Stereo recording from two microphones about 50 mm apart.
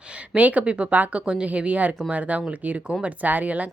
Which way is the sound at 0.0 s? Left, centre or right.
Right.